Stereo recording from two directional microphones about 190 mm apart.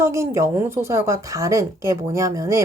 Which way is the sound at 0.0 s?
15° right (ahead or behind).